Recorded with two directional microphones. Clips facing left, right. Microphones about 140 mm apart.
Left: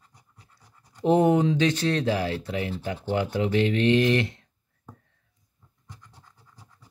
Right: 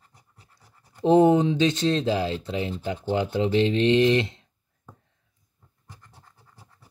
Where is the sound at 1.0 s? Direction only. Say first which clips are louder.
Right 3 dB; 30° right (ahead or behind).